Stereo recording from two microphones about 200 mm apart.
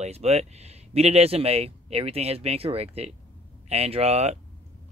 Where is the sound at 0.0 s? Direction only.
35° right (ahead or behind).